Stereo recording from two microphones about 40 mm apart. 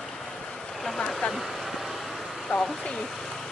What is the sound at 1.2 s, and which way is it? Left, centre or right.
Speech, left.